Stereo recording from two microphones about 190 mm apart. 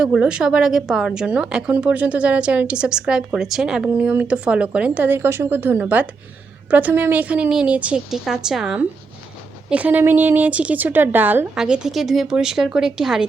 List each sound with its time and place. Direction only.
0.0 s a woman's voice: 5° right (ahead or behind)